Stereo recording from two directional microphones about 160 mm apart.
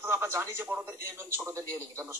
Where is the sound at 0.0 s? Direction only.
15° right (ahead or behind).